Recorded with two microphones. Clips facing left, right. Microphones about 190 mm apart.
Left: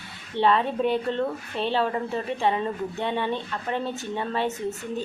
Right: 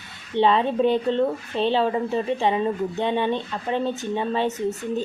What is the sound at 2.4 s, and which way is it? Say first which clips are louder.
A woman's voice: right 3 dB; 20° right (ahead or behind).